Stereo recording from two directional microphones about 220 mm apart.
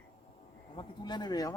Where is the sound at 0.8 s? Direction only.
20° left (ahead or behind).